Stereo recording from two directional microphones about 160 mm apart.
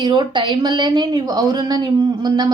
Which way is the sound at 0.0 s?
30° right (ahead or behind).